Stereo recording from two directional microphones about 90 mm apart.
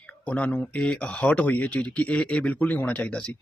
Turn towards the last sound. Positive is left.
turn(degrees=10)  # may be behind; listen again after turning